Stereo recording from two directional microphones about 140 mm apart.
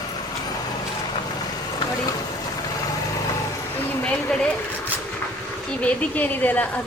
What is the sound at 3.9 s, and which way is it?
Speech, 5° left (ahead or behind).